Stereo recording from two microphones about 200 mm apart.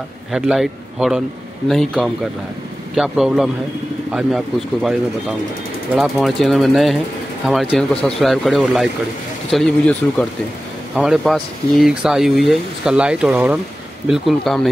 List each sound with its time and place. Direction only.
0.3 s speech: 5° right (ahead or behind)
5.9 s speech: centre (ahead or behind)